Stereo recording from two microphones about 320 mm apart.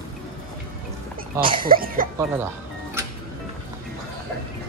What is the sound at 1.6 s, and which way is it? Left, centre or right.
Speech, right.